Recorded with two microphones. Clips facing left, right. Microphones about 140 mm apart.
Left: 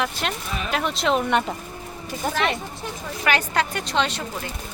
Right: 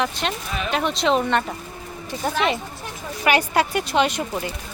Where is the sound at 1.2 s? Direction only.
15° left (ahead or behind).